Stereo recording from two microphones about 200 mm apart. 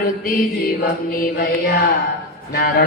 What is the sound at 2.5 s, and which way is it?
Music, 50° left (ahead or behind).